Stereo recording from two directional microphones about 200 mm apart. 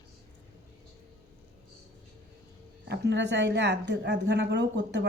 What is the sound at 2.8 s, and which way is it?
A woman's voice, 55° right (ahead or behind).